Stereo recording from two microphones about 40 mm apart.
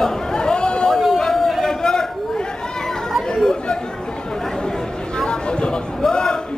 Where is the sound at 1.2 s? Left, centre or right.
Centre.